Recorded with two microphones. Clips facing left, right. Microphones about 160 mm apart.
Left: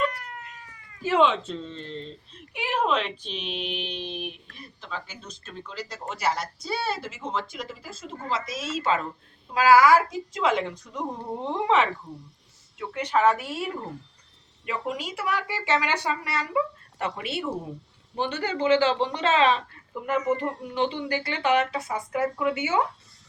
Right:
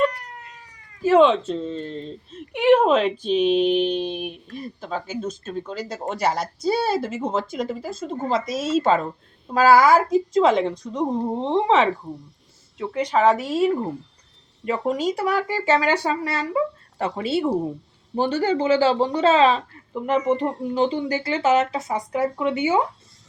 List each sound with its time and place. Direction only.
1.2 s speech: 45° right (ahead or behind)
21.1 s speech: 20° right (ahead or behind)